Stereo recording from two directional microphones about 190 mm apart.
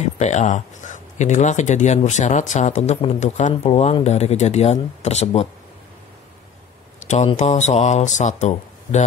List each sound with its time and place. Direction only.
0.0 s speech: 35° left (ahead or behind)
7.0 s speech: 35° left (ahead or behind)